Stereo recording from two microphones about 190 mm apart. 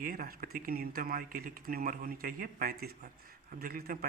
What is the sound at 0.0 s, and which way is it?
Speech, 50° right (ahead or behind).